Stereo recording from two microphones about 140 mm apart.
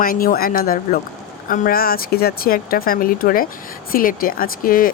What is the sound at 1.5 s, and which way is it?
Speech, 80° left.